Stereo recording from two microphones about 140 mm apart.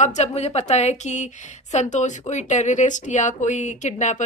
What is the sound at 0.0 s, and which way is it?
A woman's voice, 55° left (ahead or behind).